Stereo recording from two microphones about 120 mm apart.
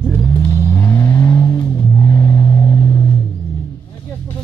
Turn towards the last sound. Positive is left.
turn(degrees=30)  # may be behind; listen again after turning